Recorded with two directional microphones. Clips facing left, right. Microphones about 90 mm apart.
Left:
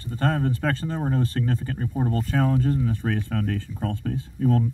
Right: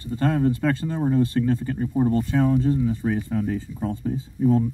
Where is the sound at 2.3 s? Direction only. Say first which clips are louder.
Right 2 dB; 50° left (ahead or behind); by 4.6 s 75° left (ahead or behind).